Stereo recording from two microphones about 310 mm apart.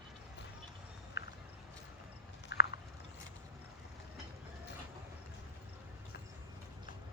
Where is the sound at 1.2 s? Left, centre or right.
Left.